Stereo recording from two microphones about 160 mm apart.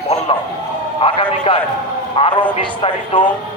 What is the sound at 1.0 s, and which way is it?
A man's voice, 35° left (ahead or behind).